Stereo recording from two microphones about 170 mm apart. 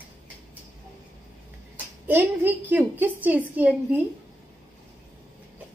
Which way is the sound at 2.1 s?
10° right (ahead or behind).